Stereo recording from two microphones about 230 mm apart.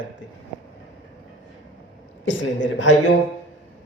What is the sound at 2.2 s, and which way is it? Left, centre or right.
Speech, left.